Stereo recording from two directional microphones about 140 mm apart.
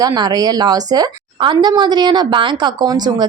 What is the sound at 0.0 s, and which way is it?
A woman's voice, 30° right (ahead or behind).